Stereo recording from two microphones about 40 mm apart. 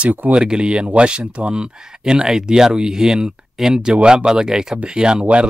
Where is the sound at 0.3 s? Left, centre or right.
Right.